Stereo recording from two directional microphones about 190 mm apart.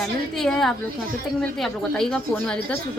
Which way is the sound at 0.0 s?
5° left (ahead or behind).